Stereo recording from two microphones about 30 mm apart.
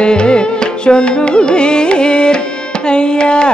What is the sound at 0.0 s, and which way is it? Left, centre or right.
Music, left.